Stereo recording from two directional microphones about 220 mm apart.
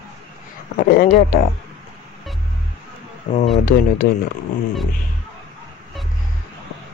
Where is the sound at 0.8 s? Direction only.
40° left (ahead or behind).